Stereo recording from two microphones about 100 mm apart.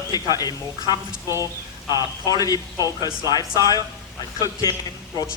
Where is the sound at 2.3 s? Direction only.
40° left (ahead or behind).